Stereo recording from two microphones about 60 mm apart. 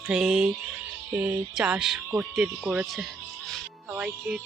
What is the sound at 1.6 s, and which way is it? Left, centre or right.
Music, centre.